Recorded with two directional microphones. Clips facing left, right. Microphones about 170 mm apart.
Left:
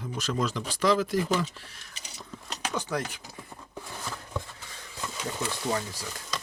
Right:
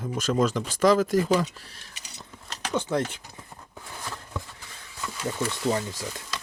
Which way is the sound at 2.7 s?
25° right (ahead or behind).